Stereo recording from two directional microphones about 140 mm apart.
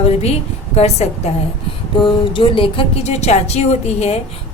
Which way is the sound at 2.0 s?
40° left (ahead or behind).